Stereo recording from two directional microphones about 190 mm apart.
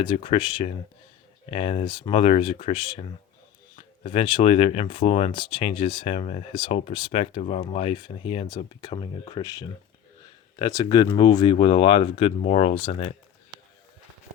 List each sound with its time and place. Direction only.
0.0 s speech: 25° left (ahead or behind)